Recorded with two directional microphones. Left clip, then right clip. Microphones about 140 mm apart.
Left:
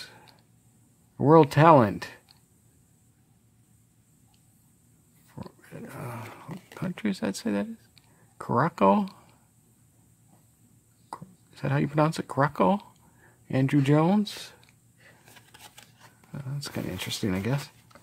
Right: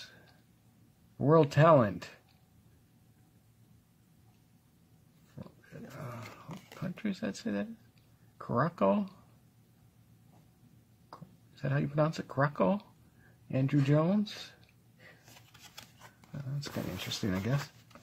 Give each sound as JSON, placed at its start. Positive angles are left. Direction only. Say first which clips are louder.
{"t": 1.1, "sound": "speech", "louder": "left 7 dB", "side_deg": 45}
{"t": 5.4, "sound": "dog", "louder": "left 7 dB", "side_deg": 45}
{"t": 6.8, "sound": "speech", "louder": "left 7 dB", "side_deg": 45}
{"t": 11.1, "sound": "speech", "louder": "left 11 dB", "side_deg": 45}
{"t": 16.3, "sound": "speech", "louder": "left 5 dB", "side_deg": 40}